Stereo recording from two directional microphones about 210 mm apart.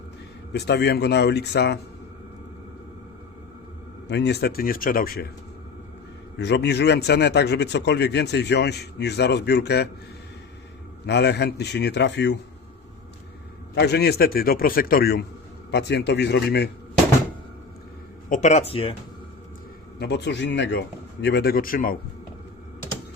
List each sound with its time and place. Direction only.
0.5 s a man's voice: 50° left (ahead or behind)
4.1 s a man's voice: 55° left (ahead or behind)
6.3 s a man's voice: 55° left (ahead or behind)
11.0 s a man's voice: 55° left (ahead or behind)
13.7 s a man's voice: 50° left (ahead or behind)
18.3 s speech: 35° left (ahead or behind)
20.0 s a man's voice: 55° left (ahead or behind)